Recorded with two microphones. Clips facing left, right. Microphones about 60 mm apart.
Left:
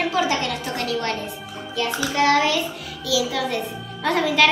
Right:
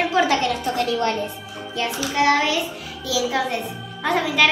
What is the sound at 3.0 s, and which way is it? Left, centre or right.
Speech, right.